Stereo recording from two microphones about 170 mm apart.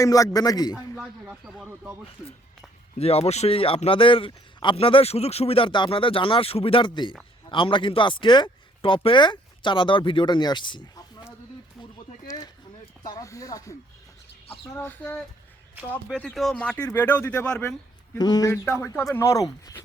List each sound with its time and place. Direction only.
0.0 s speech: 20° left (ahead or behind)
0.9 s speech: 5° right (ahead or behind)
3.0 s speech: 35° left (ahead or behind)
12.3 s a sound: 20° left (ahead or behind)
13.0 s speech: 20° left (ahead or behind)
18.2 s speech: 20° left (ahead or behind)